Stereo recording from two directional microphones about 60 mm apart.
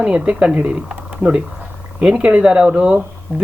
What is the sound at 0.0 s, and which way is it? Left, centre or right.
Speech, centre.